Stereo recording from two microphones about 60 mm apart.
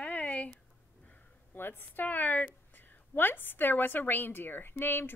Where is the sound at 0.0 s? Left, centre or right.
Centre.